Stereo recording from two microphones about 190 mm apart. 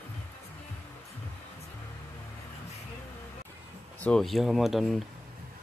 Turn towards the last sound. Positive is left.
turn(degrees=0)  # may be behind; listen again after turning